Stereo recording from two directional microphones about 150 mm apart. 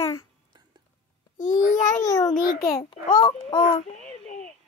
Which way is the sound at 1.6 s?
55° left (ahead or behind).